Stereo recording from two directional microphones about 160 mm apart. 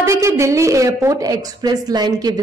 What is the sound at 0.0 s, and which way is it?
A woman's voice, 20° right (ahead or behind).